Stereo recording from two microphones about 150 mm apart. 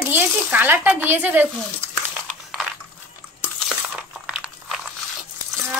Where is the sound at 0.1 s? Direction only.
10° right (ahead or behind).